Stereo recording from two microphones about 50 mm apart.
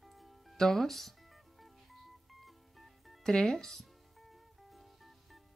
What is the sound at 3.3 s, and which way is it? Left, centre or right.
Speech, centre.